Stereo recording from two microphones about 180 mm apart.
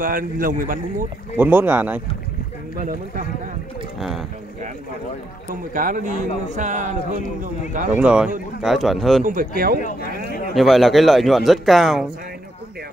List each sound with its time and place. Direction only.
0.0 s speech: 50° right (ahead or behind)
1.3 s speech: 10° right (ahead or behind)
2.8 s speech: 45° right (ahead or behind)
5.5 s speech: 45° right (ahead or behind)
7.9 s speech: 5° right (ahead or behind)
9.2 s speech: 50° right (ahead or behind)
9.8 s speech: 50° left (ahead or behind)
10.5 s speech: centre (ahead or behind)